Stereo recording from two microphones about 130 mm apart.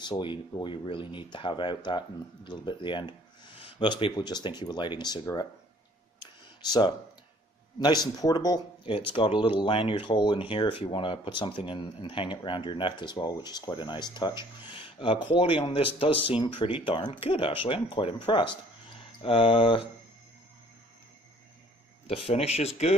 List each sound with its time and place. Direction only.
0.0 s speech: 35° left (ahead or behind)
7.8 s speech: 30° left (ahead or behind)
22.0 s speech: 50° left (ahead or behind)